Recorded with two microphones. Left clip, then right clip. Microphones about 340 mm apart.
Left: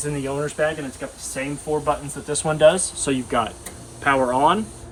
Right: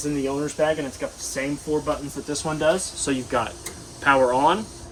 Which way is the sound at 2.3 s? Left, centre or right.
Left.